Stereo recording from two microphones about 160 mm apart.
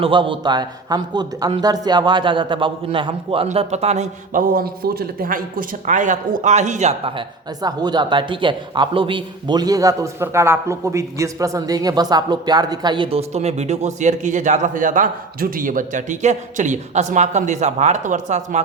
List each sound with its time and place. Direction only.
0.0 s speech: 30° right (ahead or behind)